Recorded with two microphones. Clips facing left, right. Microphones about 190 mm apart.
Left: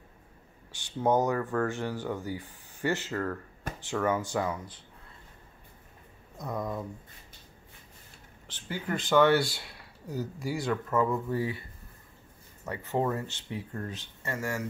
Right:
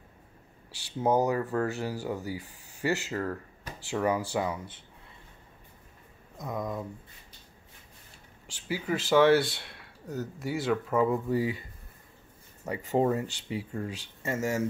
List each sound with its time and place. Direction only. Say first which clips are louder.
1.0 s speech: even; 10° right (ahead or behind)
6.3 s speech: even; centre (ahead or behind)
8.5 s speech: right 3 dB; 10° right (ahead or behind)
12.6 s speech: right 3 dB; 15° right (ahead or behind)